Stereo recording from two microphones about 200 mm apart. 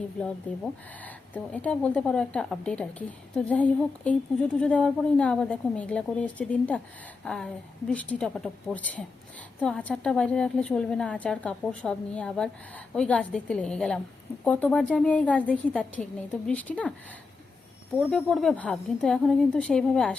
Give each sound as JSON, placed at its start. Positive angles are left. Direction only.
{"t": 0.2, "sound": "a woman's voice", "side_deg": 5}
{"t": 17.9, "sound": "a woman's voice", "side_deg": 0}